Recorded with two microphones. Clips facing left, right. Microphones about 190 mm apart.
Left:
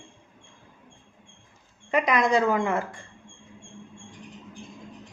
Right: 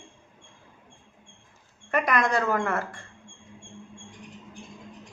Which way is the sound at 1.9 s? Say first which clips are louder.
Left 2 dB; 15° left (ahead or behind).